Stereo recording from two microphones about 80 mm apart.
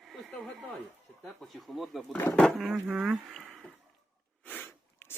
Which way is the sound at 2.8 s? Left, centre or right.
Centre.